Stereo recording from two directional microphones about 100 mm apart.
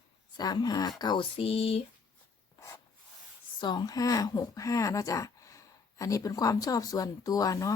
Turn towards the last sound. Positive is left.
turn(degrees=35)  # may be behind; listen again after turning